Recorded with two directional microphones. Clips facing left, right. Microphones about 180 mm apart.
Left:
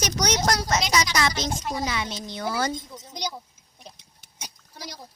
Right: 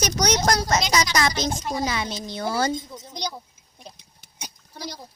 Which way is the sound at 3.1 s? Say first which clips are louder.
Right 1 dB; 5° left (ahead or behind).